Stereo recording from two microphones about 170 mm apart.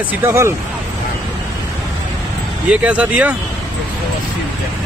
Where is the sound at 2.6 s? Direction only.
5° right (ahead or behind).